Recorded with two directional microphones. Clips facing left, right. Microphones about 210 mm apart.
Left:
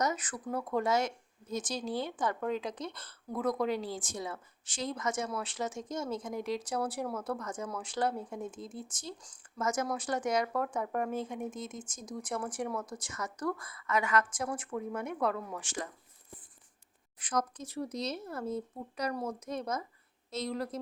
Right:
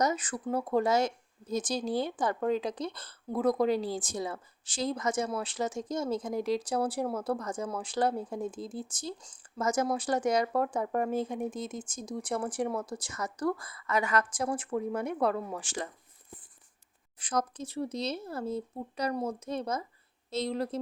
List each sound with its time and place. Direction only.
0.0 s speech: 30° right (ahead or behind)
17.2 s speech: 30° right (ahead or behind)